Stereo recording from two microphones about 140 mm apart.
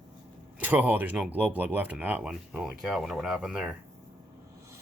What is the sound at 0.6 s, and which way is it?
Speech, 10° right (ahead or behind).